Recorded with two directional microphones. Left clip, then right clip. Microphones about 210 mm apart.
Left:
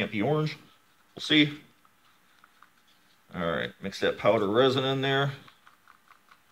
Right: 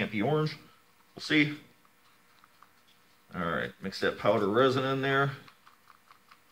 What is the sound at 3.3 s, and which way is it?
Speech, 30° left (ahead or behind).